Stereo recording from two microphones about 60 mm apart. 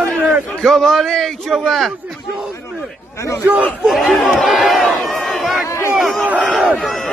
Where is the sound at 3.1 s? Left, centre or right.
Left.